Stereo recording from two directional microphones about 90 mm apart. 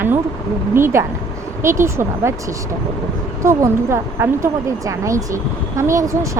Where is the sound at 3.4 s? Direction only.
30° right (ahead or behind).